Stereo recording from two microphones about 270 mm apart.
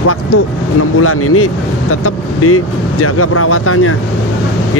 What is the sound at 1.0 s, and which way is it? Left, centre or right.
Speech, left.